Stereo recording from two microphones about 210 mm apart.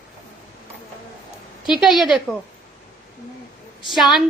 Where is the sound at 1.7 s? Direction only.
5° right (ahead or behind).